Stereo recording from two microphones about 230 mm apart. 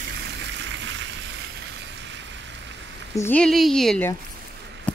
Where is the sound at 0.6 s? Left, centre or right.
Right.